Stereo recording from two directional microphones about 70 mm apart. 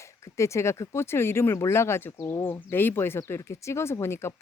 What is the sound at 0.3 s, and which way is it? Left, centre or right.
Speech, left.